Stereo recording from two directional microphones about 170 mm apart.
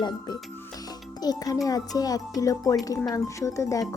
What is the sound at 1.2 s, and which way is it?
Speech, 25° left (ahead or behind).